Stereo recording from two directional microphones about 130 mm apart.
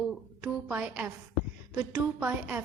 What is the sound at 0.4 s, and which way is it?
A woman's voice, 10° right (ahead or behind).